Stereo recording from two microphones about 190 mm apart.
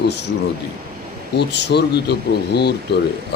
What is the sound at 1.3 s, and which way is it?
Speech, 65° left (ahead or behind).